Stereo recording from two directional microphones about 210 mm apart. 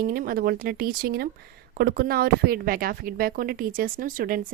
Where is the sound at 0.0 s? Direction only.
45° right (ahead or behind).